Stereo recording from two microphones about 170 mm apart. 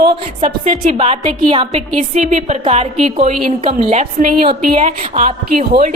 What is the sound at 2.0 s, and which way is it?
A woman's voice, 45° right (ahead or behind).